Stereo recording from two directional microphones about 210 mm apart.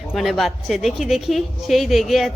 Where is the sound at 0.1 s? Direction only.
Centre (ahead or behind).